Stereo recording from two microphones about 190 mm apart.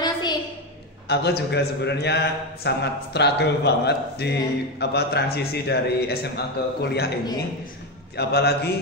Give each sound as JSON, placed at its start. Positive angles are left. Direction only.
{"t": 0.0, "sound": "a sound", "side_deg": 20}
{"t": 1.0, "sound": "a man's voice", "side_deg": 60}
{"t": 8.2, "sound": "a man's voice", "side_deg": 60}